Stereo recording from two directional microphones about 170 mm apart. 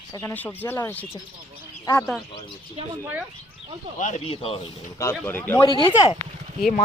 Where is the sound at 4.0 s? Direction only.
45° left (ahead or behind).